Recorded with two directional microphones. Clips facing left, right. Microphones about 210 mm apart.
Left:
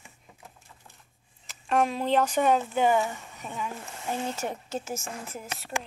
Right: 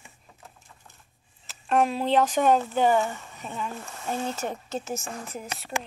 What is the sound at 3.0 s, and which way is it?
Speech, 10° left (ahead or behind).